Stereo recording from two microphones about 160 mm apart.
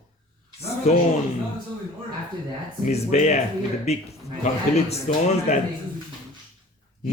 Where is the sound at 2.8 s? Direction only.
45° left (ahead or behind).